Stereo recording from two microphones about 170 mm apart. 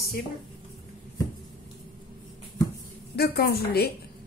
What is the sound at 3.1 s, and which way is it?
Speech, 65° left (ahead or behind).